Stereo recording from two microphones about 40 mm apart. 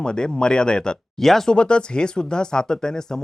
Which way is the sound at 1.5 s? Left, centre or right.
Left.